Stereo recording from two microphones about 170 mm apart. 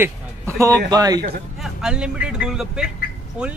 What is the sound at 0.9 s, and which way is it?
Speech, 20° right (ahead or behind).